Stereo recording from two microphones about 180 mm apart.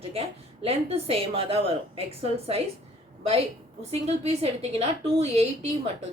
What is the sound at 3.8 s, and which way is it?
A woman's voice, 35° right (ahead or behind).